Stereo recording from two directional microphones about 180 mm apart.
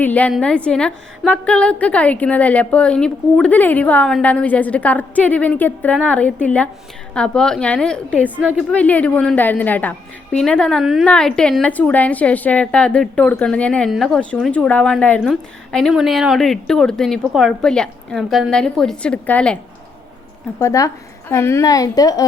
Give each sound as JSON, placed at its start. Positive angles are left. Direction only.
{"t": 0.0, "sound": "a woman's voice", "side_deg": 10}
{"t": 8.4, "sound": "a woman's voice", "side_deg": -5}
{"t": 8.7, "sound": "a woman's voice", "side_deg": 10}
{"t": 20.6, "sound": "a woman's voice", "side_deg": 15}